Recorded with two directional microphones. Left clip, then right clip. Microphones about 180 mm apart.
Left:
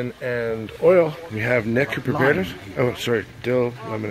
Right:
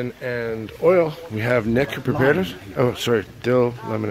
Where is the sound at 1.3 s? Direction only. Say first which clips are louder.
Right 3 dB; 20° right (ahead or behind).